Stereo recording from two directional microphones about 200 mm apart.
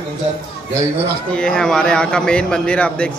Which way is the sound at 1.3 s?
5° left (ahead or behind).